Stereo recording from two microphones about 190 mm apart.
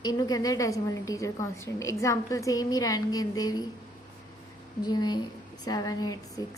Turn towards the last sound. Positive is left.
turn(degrees=20)  # may be behind; listen again after turning